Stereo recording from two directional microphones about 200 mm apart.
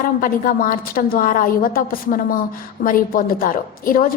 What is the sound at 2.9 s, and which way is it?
A woman's voice, 45° left (ahead or behind).